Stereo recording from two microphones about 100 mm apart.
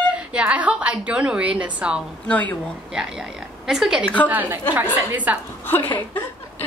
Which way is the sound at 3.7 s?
5° right (ahead or behind).